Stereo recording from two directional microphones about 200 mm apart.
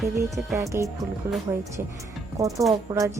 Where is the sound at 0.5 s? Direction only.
15° right (ahead or behind).